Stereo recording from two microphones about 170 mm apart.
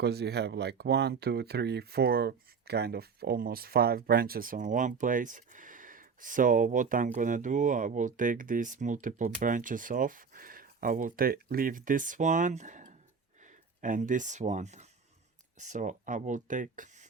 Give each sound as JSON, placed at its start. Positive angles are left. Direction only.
{"t": 0.0, "sound": "speech", "side_deg": -75}